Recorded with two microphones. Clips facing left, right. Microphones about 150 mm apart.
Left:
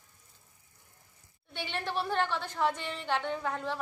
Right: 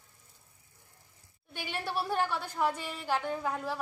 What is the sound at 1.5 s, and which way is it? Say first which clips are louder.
A woman's voice: left 1 dB; 10° right (ahead or behind).